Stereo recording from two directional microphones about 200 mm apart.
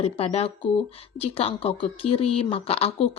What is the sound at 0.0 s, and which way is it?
Speech, 30° left (ahead or behind).